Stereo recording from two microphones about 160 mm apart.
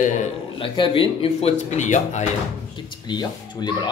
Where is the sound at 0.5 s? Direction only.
30° left (ahead or behind); by 2.3 s 45° left (ahead or behind).